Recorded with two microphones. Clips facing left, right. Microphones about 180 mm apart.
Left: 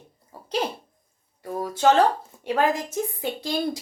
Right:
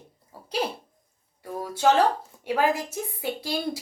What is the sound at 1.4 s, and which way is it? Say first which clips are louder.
A woman's voice: left 3 dB; 10° right (ahead or behind).